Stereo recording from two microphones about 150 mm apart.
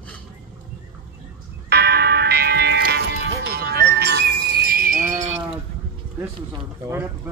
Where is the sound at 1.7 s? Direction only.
90° right; by 5.2 s 65° right (ahead or behind).